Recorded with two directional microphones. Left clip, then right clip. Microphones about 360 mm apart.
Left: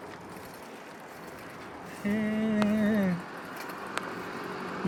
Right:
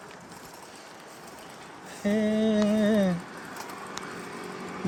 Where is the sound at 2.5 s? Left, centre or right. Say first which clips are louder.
Right 2 dB; centre.